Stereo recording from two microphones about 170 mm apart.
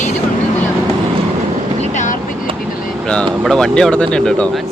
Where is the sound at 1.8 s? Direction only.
45° left (ahead or behind).